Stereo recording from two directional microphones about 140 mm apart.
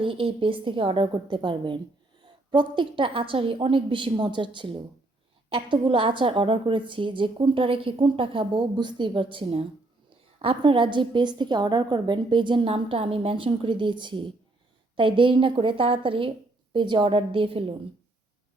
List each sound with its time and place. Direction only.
0.0 s a woman's voice: 40° right (ahead or behind)